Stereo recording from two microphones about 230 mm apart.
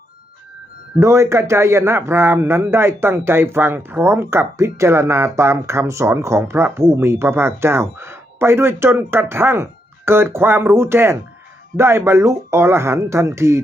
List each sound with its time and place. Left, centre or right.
0.9 s speech: centre